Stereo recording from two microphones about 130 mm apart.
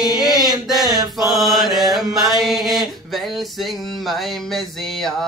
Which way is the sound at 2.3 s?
Centre (ahead or behind).